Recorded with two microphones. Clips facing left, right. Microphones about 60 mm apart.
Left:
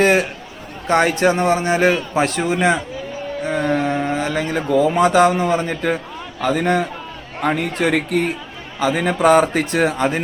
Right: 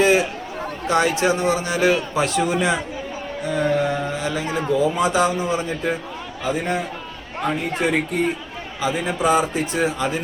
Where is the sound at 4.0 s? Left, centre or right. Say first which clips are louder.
Left 4 dB; left.